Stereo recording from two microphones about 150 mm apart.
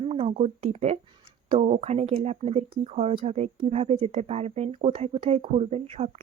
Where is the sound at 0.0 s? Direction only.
40° right (ahead or behind).